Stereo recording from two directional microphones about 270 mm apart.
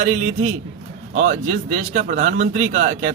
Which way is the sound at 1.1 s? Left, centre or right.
Right.